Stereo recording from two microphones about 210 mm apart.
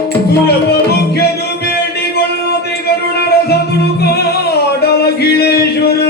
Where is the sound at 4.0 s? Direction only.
50° left (ahead or behind).